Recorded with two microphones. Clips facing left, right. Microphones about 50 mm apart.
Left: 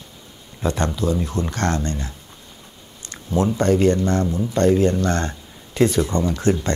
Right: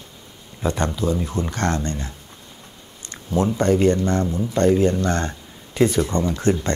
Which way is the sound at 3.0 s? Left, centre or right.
Right.